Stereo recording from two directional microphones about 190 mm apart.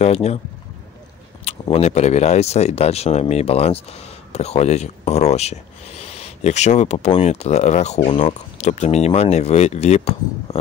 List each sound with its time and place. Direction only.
0.0 s speech: 35° left (ahead or behind)
1.4 s speech: 30° left (ahead or behind)